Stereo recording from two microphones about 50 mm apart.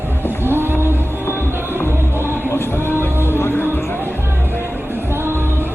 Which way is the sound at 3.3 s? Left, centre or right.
Left.